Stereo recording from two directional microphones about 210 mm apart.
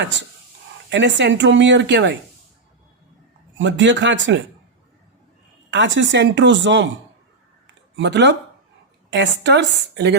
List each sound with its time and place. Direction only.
0.9 s speech: 60° right (ahead or behind)
3.6 s speech: 60° right (ahead or behind)
5.7 s speech: 60° right (ahead or behind)
7.9 s speech: 55° right (ahead or behind)